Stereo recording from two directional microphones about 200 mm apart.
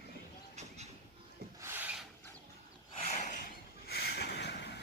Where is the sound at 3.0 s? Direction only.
35° left (ahead or behind).